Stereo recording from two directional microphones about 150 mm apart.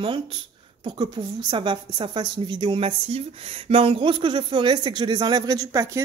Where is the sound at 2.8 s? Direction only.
45° right (ahead or behind).